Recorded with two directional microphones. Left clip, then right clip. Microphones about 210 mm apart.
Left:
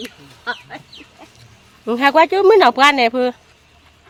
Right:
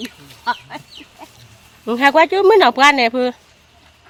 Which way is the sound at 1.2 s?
55° right (ahead or behind).